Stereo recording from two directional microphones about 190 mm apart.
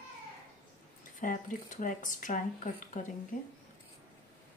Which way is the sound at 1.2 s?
40° left (ahead or behind).